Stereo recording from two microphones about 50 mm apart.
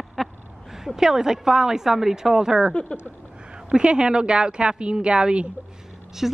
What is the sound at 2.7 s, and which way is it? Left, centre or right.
Speech, left.